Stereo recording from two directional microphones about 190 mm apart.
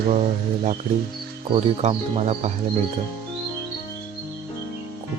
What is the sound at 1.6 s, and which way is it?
Speech, 35° right (ahead or behind).